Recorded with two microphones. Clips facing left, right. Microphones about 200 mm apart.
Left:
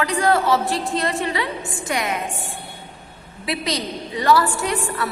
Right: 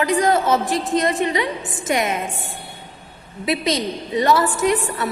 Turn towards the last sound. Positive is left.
turn(degrees=-20)  # may be behind; listen again after turning